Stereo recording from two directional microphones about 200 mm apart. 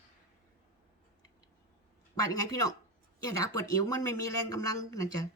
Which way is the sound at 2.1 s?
20° left (ahead or behind).